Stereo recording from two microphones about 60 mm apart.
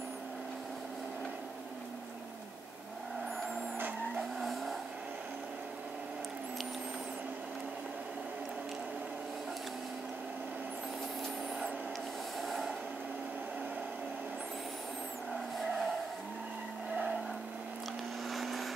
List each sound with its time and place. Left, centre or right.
4.2 s vehicle: centre
12.4 s train: centre
15.3 s vehicle: centre
16.9 s vehicle: centre
18.3 s vehicle: centre